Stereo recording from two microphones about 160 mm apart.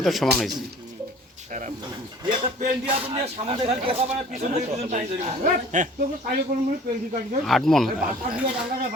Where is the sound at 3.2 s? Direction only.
35° right (ahead or behind); by 6.4 s 55° right (ahead or behind).